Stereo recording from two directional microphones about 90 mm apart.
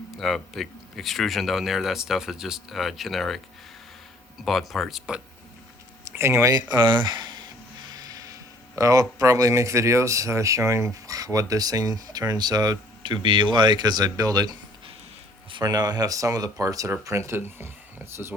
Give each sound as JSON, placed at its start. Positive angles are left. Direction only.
{"t": 0.2, "sound": "speech", "side_deg": 0}
{"t": 4.4, "sound": "speech", "side_deg": 0}
{"t": 6.1, "sound": "speech", "side_deg": -30}
{"t": 6.7, "sound": "speech", "side_deg": -55}
{"t": 13.2, "sound": "speech", "side_deg": -65}
{"t": 15.6, "sound": "speech", "side_deg": -45}